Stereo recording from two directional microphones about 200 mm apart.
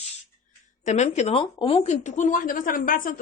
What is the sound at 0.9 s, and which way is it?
A woman's voice, 35° left (ahead or behind).